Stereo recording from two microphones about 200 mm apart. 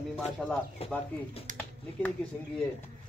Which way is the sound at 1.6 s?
10° left (ahead or behind).